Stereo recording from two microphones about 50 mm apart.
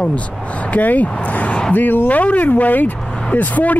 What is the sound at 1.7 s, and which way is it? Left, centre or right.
Speech, left.